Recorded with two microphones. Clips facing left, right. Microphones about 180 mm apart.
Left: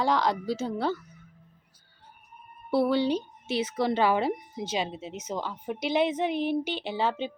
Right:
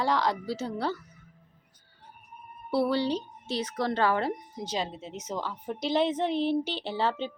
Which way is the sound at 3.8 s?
20° left (ahead or behind).